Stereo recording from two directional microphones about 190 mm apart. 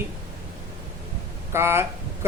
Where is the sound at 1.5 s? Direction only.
15° right (ahead or behind).